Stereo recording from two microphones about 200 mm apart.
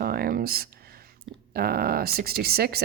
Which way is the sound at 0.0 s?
50° right (ahead or behind).